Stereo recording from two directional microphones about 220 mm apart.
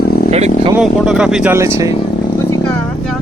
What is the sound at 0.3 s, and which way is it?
Speech, 30° right (ahead or behind).